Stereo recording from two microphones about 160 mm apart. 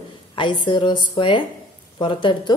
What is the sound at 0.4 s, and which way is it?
Speech, 30° left (ahead or behind).